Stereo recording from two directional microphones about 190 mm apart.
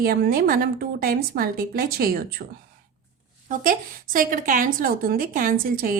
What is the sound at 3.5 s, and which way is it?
A woman's voice, 45° right (ahead or behind).